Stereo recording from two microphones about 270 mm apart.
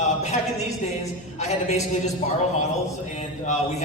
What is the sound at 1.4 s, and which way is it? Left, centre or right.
Speech, left.